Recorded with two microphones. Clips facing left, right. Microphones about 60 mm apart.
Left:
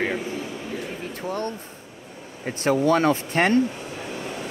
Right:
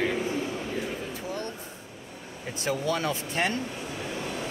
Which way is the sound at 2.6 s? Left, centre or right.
Left.